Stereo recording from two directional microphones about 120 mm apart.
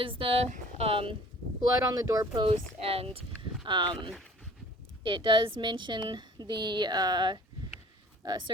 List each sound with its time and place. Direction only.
0.0 s speech: 45° right (ahead or behind)
1.9 s a woman's voice: 30° right (ahead or behind)
2.4 s speech: 55° right (ahead or behind)
3.7 s a woman's voice: 40° right (ahead or behind)